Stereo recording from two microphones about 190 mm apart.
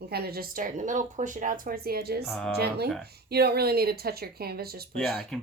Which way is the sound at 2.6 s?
55° right (ahead or behind).